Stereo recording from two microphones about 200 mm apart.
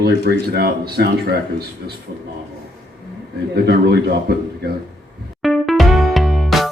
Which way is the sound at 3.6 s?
50° right (ahead or behind).